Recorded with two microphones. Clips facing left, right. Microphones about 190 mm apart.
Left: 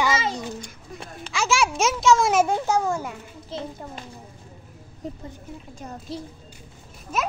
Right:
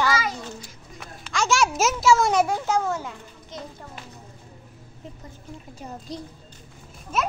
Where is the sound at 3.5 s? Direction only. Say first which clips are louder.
Left 5 dB; 30° left (ahead or behind).